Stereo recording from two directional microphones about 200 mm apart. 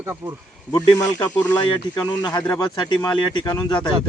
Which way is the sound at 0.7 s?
20° left (ahead or behind).